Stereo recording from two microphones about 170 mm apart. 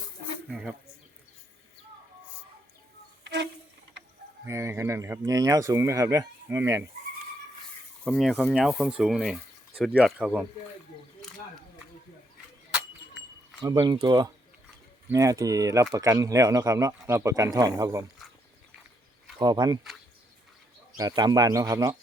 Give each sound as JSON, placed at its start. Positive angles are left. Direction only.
{"t": 0.4, "sound": "a sound", "side_deg": 0}
{"t": 4.4, "sound": "speech", "side_deg": -15}
{"t": 8.0, "sound": "speech", "side_deg": 0}
{"t": 13.6, "sound": "speech", "side_deg": -25}
{"t": 19.4, "sound": "speech", "side_deg": -25}
{"t": 21.0, "sound": "speech", "side_deg": -20}